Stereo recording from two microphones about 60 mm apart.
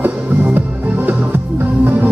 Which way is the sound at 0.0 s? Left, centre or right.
Right.